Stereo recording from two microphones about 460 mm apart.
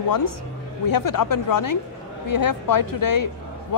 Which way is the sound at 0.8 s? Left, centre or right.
Left.